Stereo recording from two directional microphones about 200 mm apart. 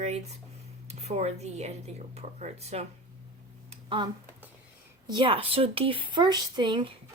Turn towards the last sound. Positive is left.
turn(degrees=-25)  # may be behind; listen again after turning